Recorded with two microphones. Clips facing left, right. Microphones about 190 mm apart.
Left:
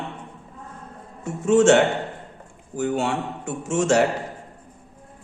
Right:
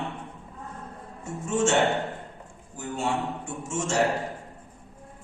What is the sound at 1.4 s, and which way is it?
A man's voice, 70° left (ahead or behind).